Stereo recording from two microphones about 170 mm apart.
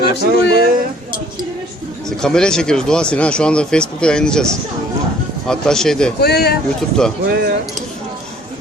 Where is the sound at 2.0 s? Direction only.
5° left (ahead or behind).